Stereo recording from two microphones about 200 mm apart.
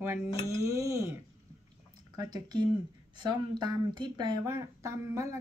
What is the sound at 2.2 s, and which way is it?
Speech, 20° right (ahead or behind).